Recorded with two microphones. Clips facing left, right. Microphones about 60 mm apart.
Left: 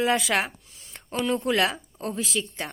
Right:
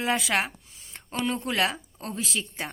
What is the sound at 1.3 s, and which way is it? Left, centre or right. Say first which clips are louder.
Speech: left 4 dB; centre.